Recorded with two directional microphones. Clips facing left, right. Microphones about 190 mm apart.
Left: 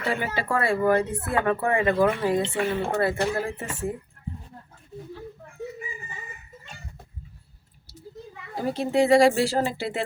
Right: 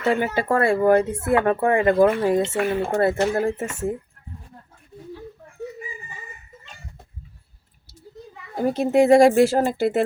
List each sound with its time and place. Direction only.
0.0 s speech: 45° right (ahead or behind)
8.5 s speech: 50° right (ahead or behind)